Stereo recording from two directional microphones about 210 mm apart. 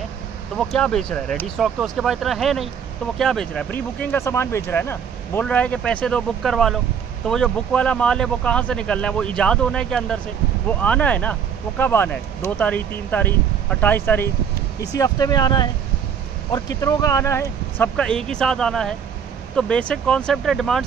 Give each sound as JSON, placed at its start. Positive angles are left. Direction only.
{"t": 0.6, "sound": "speech", "side_deg": 0}